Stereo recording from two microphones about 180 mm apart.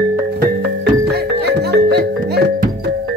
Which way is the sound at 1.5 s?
65° right (ahead or behind).